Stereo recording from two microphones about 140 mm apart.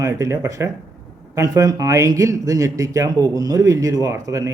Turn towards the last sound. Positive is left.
turn(degrees=-20)  # may be behind; listen again after turning